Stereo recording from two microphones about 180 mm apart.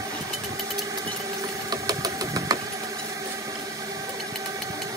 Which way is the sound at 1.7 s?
20° right (ahead or behind).